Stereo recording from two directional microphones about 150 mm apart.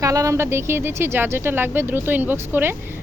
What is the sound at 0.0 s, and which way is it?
Speech, 20° right (ahead or behind).